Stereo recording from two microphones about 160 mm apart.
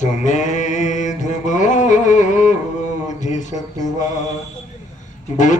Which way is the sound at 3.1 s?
50° left (ahead or behind).